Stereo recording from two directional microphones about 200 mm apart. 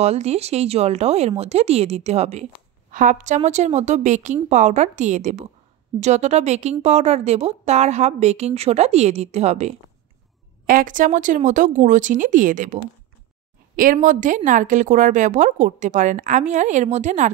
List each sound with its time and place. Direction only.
0.0 s a woman's voice: 30° right (ahead or behind)
10.7 s a woman's voice: 40° right (ahead or behind)
13.9 s a woman's voice: 40° right (ahead or behind)